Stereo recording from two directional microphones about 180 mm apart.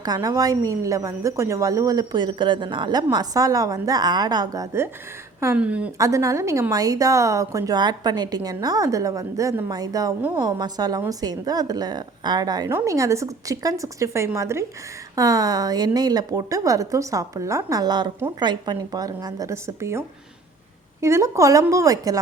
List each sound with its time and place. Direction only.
0.0 s a woman's voice: 20° right (ahead or behind)